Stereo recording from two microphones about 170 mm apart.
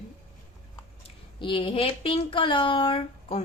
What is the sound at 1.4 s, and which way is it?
Speech, 30° left (ahead or behind).